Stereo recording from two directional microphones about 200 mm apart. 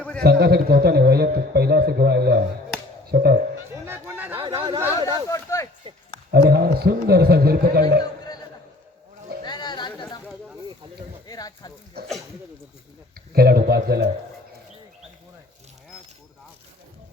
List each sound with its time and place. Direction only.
0.2 s a man's voice: 50° right (ahead or behind)
3.8 s a sound: 10° right (ahead or behind)
4.4 s speech: 25° right (ahead or behind)
4.9 s speech: 15° left (ahead or behind)
5.8 s speech: 25° right (ahead or behind)
6.5 s a man's voice: 50° right (ahead or behind)
9.4 s a sound: 20° left (ahead or behind)
11.3 s a sound: 20° left (ahead or behind)
12.0 s a man's voice: 50° right (ahead or behind)
13.3 s a man's voice: 50° right (ahead or behind)